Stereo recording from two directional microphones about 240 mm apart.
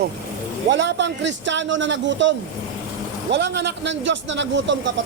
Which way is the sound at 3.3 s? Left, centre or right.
Right.